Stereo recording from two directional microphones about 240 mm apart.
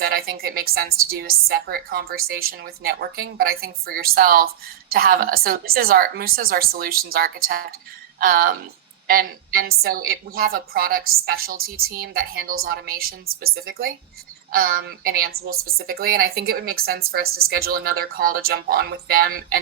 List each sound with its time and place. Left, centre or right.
0.0 s a woman's voice: right